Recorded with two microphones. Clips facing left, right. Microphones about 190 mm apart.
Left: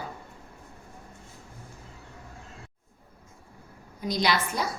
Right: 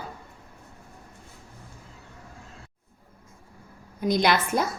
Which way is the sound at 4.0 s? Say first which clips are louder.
Right 4 dB; 55° right (ahead or behind).